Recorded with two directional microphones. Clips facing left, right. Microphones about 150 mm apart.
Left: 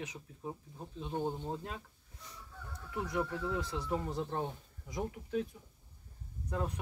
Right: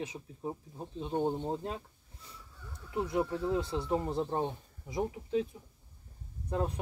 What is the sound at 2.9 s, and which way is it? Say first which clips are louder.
Speech: right 4 dB; 25° right (ahead or behind).